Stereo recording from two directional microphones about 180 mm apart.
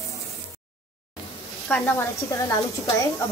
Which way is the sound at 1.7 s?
10° left (ahead or behind).